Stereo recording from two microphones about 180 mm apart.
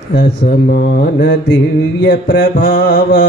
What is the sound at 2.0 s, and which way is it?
Music, 85° left.